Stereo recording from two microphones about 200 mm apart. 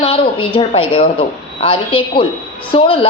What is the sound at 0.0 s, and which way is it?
A woman's voice, 25° left (ahead or behind).